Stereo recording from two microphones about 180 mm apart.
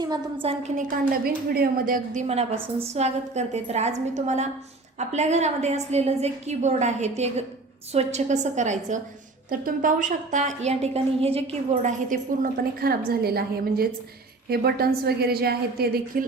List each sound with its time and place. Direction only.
0.0 s a woman's voice: 25° right (ahead or behind)
0.8 s a woman's voice: 50° right (ahead or behind)